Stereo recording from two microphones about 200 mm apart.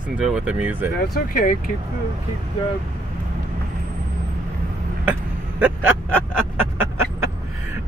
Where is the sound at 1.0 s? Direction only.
45° left (ahead or behind).